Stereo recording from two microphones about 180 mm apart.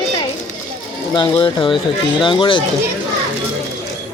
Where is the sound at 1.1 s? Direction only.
25° left (ahead or behind).